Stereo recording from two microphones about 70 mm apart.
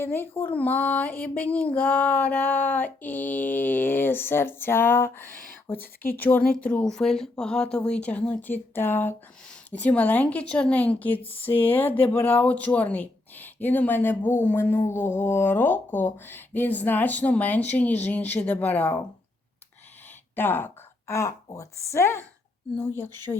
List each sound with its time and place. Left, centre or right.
0.0 s speech: left
6.8 s speech: centre; by 9.1 s left
9.7 s speech: left
20.3 s speech: left
21.1 s speech: left
21.9 s speech: left